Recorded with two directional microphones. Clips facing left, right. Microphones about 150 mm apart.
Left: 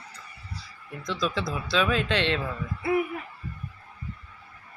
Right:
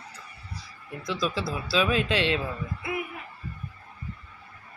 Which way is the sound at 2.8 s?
40° left (ahead or behind).